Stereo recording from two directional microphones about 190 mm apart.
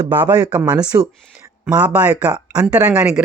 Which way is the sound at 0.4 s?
5° right (ahead or behind).